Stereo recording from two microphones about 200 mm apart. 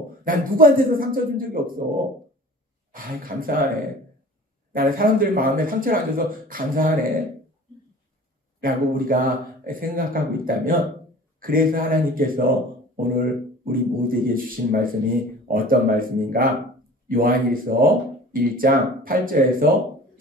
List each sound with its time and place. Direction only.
0.2 s speech: 45° right (ahead or behind)
2.9 s speech: 45° right (ahead or behind)
4.7 s speech: 45° right (ahead or behind)
8.6 s speech: 45° right (ahead or behind)